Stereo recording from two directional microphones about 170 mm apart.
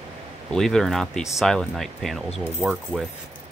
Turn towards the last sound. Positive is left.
turn(degrees=-5)  # may be behind; listen again after turning